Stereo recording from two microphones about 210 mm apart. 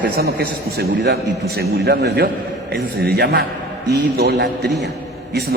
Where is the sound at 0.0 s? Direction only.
50° right (ahead or behind).